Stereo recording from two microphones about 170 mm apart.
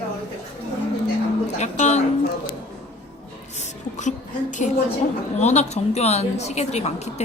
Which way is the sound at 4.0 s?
45° left (ahead or behind).